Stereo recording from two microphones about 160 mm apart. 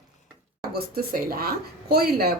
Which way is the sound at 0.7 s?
70° right (ahead or behind).